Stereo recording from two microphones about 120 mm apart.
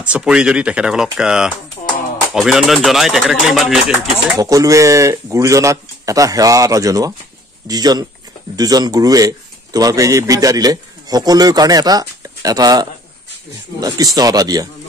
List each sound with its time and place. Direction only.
0.0 s speech: 10° right (ahead or behind)
4.4 s a man's voice: 30° right (ahead or behind)